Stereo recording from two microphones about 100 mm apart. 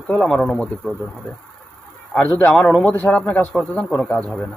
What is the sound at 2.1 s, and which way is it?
A man's voice, 15° left (ahead or behind).